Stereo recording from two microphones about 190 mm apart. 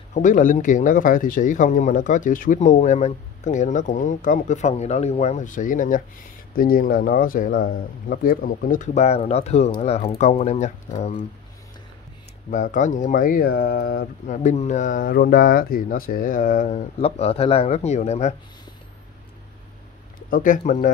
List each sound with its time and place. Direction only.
0.1 s speech: 40° left (ahead or behind)
12.4 s speech: 40° left (ahead or behind)
20.2 s speech: 45° left (ahead or behind)